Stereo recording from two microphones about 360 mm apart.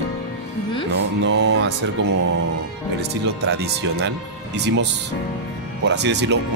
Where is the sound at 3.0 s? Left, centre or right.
Right.